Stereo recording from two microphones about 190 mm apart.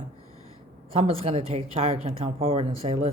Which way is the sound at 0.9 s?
30° right (ahead or behind).